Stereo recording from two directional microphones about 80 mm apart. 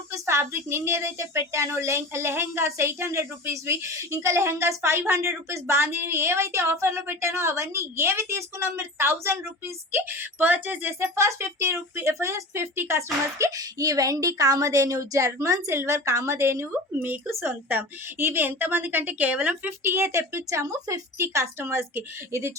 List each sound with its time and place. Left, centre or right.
0.1 s a woman's voice: right
11.0 s a woman's voice: right; by 19.7 s centre
19.8 s a woman's voice: right